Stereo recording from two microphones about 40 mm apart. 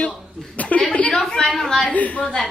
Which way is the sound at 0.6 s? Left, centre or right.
Left.